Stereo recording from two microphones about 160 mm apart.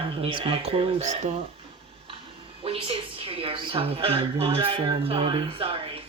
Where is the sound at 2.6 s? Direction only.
35° right (ahead or behind).